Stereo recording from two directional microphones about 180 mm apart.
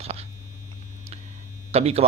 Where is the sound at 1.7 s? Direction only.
35° right (ahead or behind).